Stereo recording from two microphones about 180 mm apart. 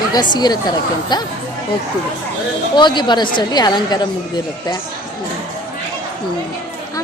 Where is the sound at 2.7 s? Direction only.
25° left (ahead or behind).